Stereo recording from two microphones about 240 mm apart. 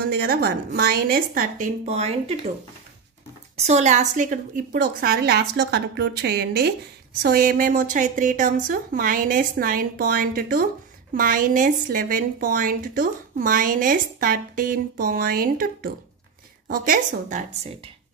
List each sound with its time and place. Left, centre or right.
0.0 s speech: right
3.5 s speech: right